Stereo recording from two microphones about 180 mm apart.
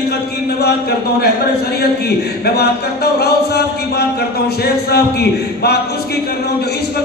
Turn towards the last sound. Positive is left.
turn(degrees=65)  # may be behind; listen again after turning